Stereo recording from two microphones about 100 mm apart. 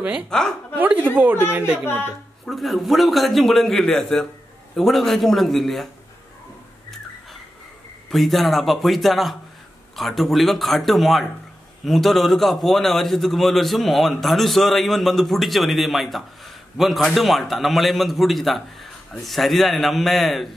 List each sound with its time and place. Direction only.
0.3 s a man's voice: 5° left (ahead or behind)
0.7 s speech: 15° right (ahead or behind)
2.4 s a man's voice: centre (ahead or behind)
8.1 s a man's voice: centre (ahead or behind)